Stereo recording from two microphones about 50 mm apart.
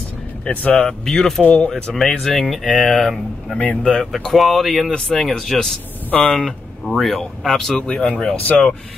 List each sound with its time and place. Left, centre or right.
0.5 s speech: left
0.8 s speech: centre
2.1 s speech: centre
7.8 s speech: left